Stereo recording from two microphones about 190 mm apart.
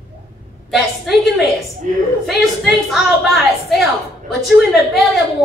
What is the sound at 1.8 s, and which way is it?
Speech, 45° right (ahead or behind).